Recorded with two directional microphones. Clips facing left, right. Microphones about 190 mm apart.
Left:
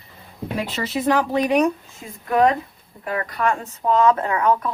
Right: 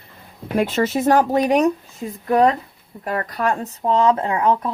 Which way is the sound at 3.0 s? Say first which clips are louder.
Right 1 dB; 45° right (ahead or behind).